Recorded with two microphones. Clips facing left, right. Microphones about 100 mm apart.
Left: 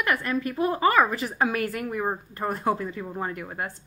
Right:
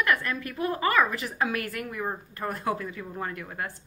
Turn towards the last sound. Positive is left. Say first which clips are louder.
# left 2 dB
turn(degrees=20)  # may be behind; listen again after turning